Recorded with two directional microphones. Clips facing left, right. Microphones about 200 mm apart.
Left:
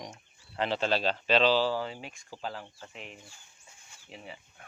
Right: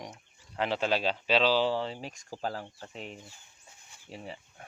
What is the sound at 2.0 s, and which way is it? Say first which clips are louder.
Speech: right 4 dB; 40° right (ahead or behind).